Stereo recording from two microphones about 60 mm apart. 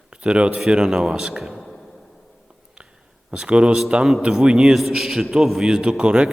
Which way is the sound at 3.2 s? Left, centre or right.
Centre.